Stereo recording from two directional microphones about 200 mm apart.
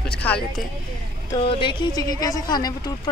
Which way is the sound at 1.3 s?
25° left (ahead or behind).